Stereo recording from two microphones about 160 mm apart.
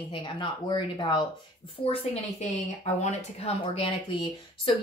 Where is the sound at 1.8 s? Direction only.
40° left (ahead or behind).